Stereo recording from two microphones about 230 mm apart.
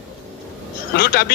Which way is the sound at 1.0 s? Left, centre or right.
Left.